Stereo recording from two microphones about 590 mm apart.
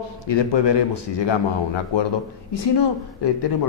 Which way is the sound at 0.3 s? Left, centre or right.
Left.